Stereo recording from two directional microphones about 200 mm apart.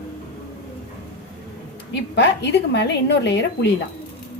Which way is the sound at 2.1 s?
60° left (ahead or behind).